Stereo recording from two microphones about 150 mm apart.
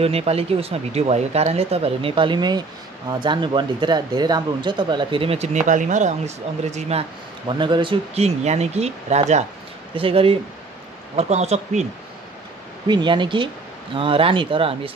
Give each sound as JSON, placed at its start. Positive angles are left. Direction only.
{"t": 0.0, "sound": "speech", "side_deg": -45}
{"t": 7.4, "sound": "speech", "side_deg": -30}
{"t": 9.9, "sound": "speech", "side_deg": -40}
{"t": 12.8, "sound": "speech", "side_deg": -30}